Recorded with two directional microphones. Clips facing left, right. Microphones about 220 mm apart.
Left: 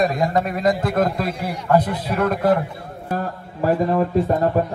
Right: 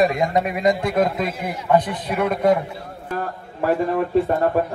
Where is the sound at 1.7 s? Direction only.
5° left (ahead or behind).